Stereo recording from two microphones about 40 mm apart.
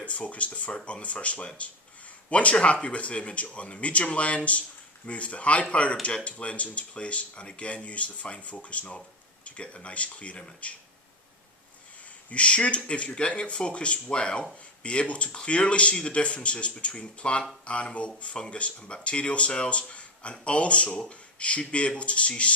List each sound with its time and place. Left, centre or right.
0.0 s speech: left
12.3 s speech: left